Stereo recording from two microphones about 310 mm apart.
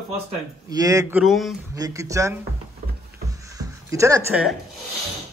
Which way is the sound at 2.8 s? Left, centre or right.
Right.